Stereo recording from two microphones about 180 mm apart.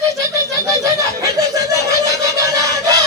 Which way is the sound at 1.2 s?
20° right (ahead or behind).